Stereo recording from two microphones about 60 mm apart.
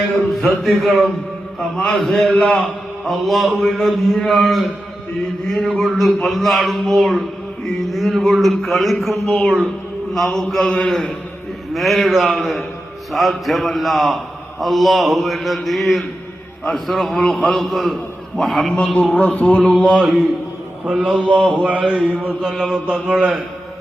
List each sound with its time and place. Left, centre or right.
0.6 s a man's voice: centre
2.4 s a man's voice: centre
3.1 s a man's voice: centre
10.2 s a man's voice: centre
10.6 s a man's voice: centre
11.7 s a man's voice: centre
18.9 s a man's voice: left
20.0 s a man's voice: centre
20.8 s a man's voice: centre
21.5 s mantra: centre
21.8 s a man's voice: centre
22.4 s a man's voice: centre
22.9 s a man's voice: centre